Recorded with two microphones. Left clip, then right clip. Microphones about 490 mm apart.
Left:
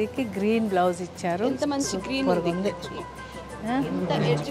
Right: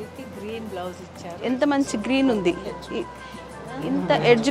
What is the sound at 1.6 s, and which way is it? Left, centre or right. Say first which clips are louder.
Speech: right 5 dB; right.